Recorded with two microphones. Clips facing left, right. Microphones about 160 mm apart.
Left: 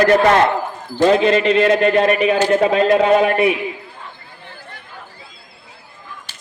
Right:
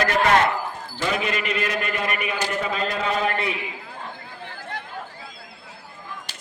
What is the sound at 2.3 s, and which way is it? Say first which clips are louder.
Speech: left 12 dB; 85° left.